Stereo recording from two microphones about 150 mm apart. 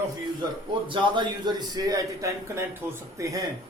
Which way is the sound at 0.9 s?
35° right (ahead or behind).